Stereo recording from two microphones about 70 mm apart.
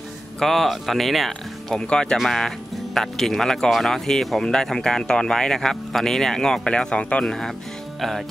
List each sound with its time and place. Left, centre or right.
0.4 s speech: centre
1.8 s speech: centre
2.1 s speech: centre